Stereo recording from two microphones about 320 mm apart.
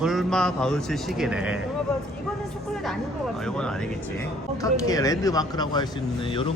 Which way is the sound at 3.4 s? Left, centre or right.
Centre.